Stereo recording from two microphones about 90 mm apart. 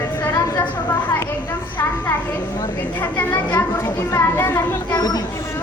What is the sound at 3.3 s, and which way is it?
Speech, 30° left (ahead or behind).